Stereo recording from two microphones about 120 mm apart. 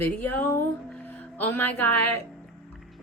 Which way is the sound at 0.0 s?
15° left (ahead or behind).